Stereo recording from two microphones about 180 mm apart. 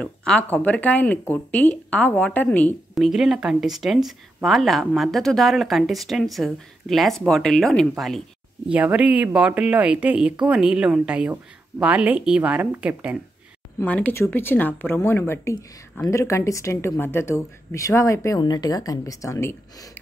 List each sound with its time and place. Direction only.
0.0 s speech: 5° left (ahead or behind)
13.7 s a woman's voice: 10° left (ahead or behind)